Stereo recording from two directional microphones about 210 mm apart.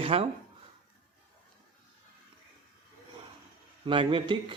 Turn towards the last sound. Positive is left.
turn(degrees=-25)  # may be behind; listen again after turning